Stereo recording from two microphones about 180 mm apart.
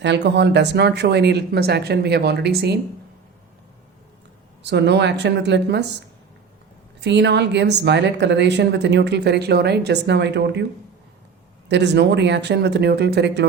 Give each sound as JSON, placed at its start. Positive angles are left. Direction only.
{"t": 0.0, "sound": "speech", "side_deg": -75}
{"t": 4.6, "sound": "speech", "side_deg": -70}
{"t": 7.0, "sound": "speech", "side_deg": -75}
{"t": 11.7, "sound": "speech", "side_deg": -75}